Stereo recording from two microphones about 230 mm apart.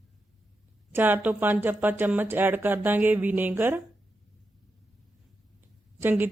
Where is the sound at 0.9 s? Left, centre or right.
Centre.